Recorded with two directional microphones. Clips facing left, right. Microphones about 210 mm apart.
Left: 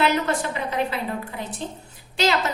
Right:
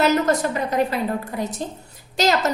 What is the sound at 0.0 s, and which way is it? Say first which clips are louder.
A woman's voice: right 4 dB; 40° right (ahead or behind).